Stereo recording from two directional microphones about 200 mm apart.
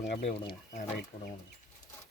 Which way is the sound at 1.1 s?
40° left (ahead or behind).